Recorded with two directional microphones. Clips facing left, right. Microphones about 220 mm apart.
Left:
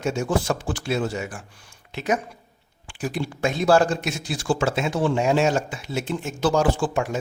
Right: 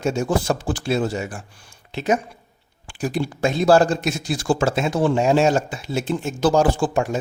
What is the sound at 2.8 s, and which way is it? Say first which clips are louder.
Speech: right 4 dB; 40° right (ahead or behind).